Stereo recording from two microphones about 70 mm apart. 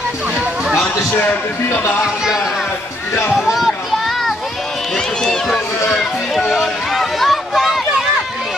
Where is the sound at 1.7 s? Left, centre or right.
Left.